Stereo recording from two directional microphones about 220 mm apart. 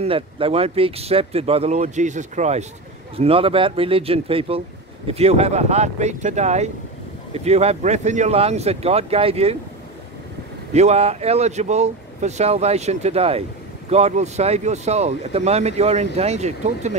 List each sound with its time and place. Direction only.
0.0 s speech: 25° right (ahead or behind)
10.7 s speech: 30° right (ahead or behind)